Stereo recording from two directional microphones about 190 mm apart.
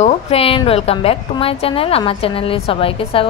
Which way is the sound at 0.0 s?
30° left (ahead or behind).